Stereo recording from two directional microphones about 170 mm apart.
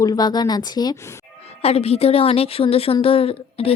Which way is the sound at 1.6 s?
35° left (ahead or behind).